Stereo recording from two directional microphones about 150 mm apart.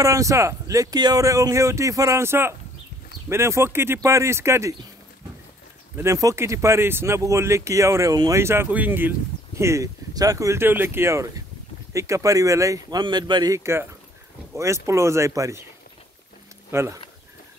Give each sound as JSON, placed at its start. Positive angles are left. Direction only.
{"t": 0.0, "sound": "speech", "side_deg": -20}
{"t": 5.9, "sound": "speech", "side_deg": -20}
{"t": 16.7, "sound": "speech", "side_deg": -20}